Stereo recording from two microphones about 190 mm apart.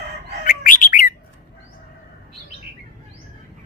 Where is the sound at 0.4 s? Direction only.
45° left (ahead or behind).